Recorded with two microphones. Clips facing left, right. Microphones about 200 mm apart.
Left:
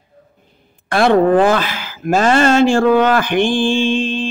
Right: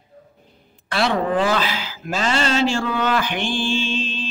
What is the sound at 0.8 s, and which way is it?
A man's voice, 50° left (ahead or behind).